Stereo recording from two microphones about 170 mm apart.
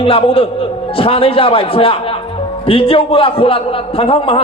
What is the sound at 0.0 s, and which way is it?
A man's voice, 30° left (ahead or behind).